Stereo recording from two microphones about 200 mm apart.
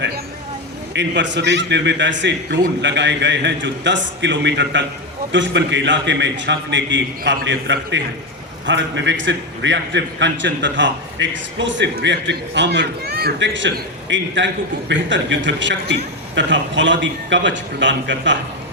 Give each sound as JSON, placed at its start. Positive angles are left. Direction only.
{"t": 0.9, "sound": "a man's voice", "side_deg": -60}